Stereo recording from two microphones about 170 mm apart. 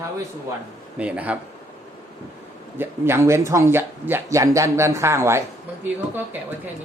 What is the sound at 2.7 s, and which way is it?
Speech, 15° right (ahead or behind).